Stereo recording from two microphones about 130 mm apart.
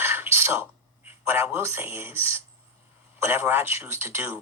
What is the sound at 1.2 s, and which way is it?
Speech, 15° right (ahead or behind).